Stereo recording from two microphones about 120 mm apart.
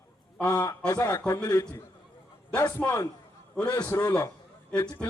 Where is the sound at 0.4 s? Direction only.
30° left (ahead or behind).